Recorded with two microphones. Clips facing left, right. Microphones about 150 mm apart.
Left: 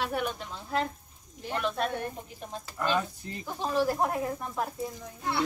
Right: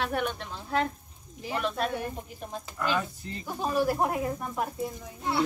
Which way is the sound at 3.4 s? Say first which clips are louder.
Right 1 dB; 5° right (ahead or behind).